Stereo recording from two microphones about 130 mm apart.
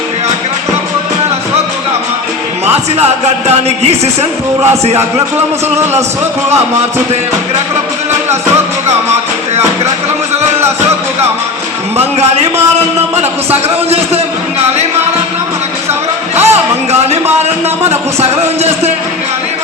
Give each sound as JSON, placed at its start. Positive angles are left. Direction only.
{"t": 2.6, "sound": "speech", "side_deg": -55}
{"t": 13.5, "sound": "a man's voice", "side_deg": -55}
{"t": 16.3, "sound": "music", "side_deg": -55}
{"t": 17.8, "sound": "a man's voice", "side_deg": -55}